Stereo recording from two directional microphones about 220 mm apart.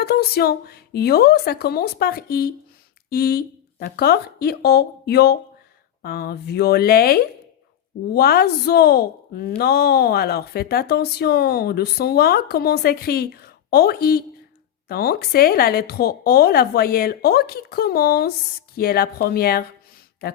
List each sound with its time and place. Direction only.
0.0 s speech: 45° left (ahead or behind)